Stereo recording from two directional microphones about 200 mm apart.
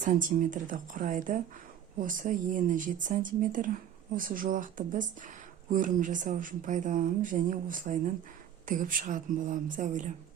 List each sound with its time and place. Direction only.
0.0 s a woman's voice: 40° right (ahead or behind)